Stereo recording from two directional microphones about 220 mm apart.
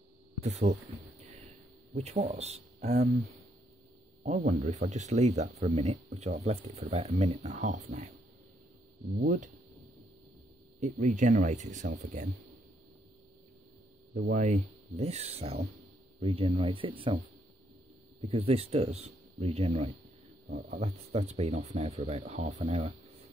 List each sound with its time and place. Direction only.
0.4 s speech: 30° right (ahead or behind)
2.0 s speech: 30° right (ahead or behind)
4.2 s speech: 35° right (ahead or behind)
9.2 s speech: 35° right (ahead or behind)
10.8 s speech: 35° right (ahead or behind)
14.1 s speech: 40° right (ahead or behind); by 17.2 s 25° right (ahead or behind)
18.2 s speech: 25° right (ahead or behind)
22.6 s a sound: 25° right (ahead or behind)